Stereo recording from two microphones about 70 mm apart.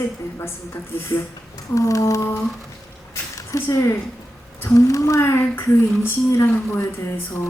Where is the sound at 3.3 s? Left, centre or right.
Left.